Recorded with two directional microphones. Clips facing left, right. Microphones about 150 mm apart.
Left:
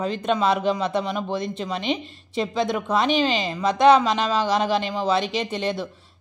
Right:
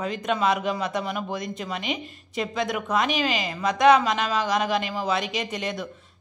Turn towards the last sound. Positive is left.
turn(degrees=30)  # may be behind; listen again after turning